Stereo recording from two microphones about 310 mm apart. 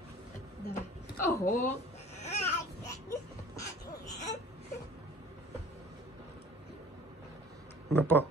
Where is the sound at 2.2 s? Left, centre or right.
Left.